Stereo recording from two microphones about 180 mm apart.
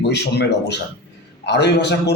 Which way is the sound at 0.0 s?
70° left (ahead or behind).